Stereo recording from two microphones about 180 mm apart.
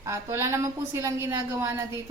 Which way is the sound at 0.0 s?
15° right (ahead or behind).